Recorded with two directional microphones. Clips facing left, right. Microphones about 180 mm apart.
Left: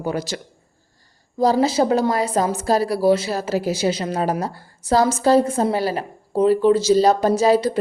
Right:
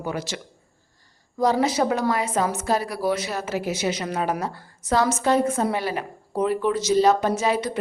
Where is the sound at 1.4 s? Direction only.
30° left (ahead or behind).